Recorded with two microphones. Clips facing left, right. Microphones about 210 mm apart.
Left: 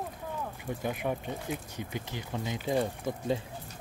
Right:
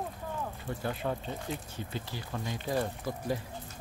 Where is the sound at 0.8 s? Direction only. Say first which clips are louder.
Left 1 dB; 15° left (ahead or behind).